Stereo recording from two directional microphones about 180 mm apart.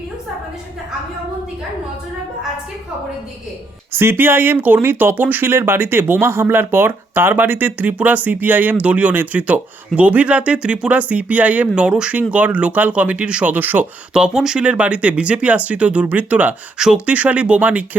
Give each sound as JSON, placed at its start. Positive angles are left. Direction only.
{"t": 3.9, "sound": "speech", "side_deg": -15}